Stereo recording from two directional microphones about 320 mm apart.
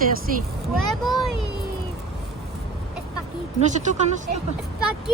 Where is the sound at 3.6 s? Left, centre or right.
Right.